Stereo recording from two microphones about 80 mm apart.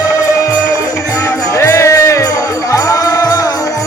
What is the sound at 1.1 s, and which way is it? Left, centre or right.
Music, left.